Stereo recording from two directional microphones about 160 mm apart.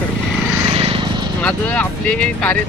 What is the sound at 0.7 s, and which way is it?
Vehicle, 35° right (ahead or behind).